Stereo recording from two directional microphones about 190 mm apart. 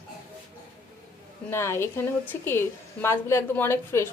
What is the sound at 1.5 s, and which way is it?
A woman's voice, 15° left (ahead or behind).